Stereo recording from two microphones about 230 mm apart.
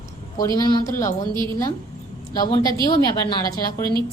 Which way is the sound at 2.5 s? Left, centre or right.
Centre.